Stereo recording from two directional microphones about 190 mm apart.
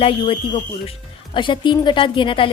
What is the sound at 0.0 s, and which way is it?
A woman's voice, 30° left (ahead or behind).